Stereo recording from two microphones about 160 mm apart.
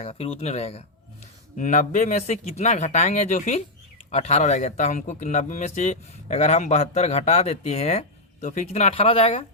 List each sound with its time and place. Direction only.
0.0 s speech: 40° left (ahead or behind)
1.5 s speech: 50° left (ahead or behind); by 9.5 s 35° left (ahead or behind)